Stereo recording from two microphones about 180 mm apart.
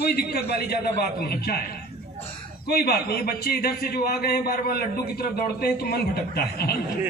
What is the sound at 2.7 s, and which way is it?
A man's voice, 60° left (ahead or behind).